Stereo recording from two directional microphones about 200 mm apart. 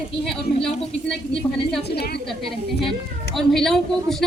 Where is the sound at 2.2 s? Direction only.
Centre (ahead or behind).